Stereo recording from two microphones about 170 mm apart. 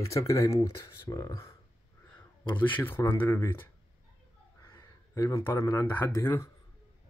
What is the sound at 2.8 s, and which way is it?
Speech, 15° left (ahead or behind).